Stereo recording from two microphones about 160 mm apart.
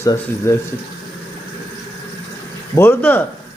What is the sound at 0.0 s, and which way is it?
Speech, 15° left (ahead or behind).